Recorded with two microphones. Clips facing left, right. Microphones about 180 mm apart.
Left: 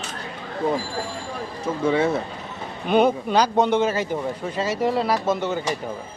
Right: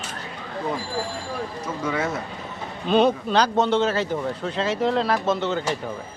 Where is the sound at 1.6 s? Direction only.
30° left (ahead or behind).